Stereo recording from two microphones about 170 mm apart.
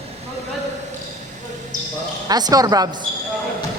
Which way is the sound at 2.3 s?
25° right (ahead or behind).